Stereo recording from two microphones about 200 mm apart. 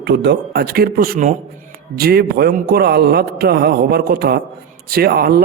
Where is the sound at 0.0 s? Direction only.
55° right (ahead or behind).